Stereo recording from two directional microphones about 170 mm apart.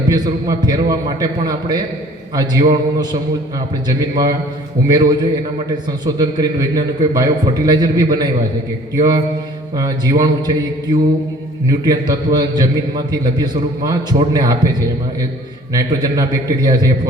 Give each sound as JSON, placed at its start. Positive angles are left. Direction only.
{"t": 0.1, "sound": "a man's voice", "side_deg": -25}